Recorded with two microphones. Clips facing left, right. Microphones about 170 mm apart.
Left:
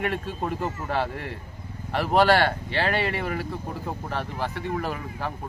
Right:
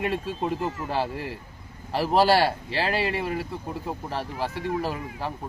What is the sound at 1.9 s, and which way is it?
Speech, 30° right (ahead or behind).